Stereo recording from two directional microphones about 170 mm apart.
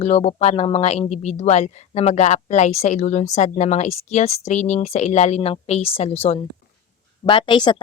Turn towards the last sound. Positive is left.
turn(degrees=25)  # may be behind; listen again after turning